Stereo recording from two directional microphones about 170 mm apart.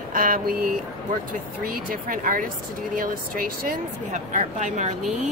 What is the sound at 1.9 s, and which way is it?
A woman's voice, 55° right (ahead or behind).